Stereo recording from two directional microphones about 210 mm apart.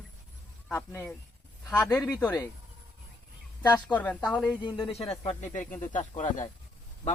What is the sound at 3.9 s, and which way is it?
Speech, 5° left (ahead or behind).